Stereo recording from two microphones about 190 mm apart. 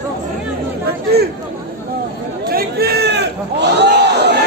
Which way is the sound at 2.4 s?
55° right (ahead or behind).